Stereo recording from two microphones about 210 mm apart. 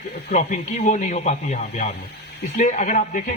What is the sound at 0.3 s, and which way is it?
A man's voice, 40° left (ahead or behind).